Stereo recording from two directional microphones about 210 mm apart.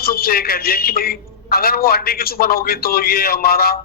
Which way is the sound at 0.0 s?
45° left (ahead or behind).